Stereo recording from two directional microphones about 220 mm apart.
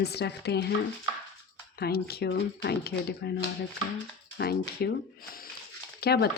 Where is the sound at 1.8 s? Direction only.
45° left (ahead or behind).